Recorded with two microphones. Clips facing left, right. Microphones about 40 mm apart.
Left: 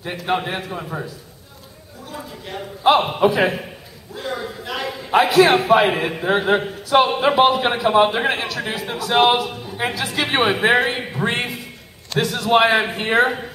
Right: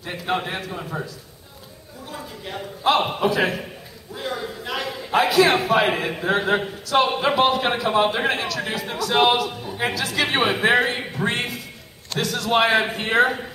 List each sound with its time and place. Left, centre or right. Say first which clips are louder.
0.3 s a man's voice: left 3 dB; centre
2.0 s a woman's voice: left 1 dB; centre
3.2 s a man's voice: left 4 dB; centre
4.1 s a man's voice: left 1 dB; centre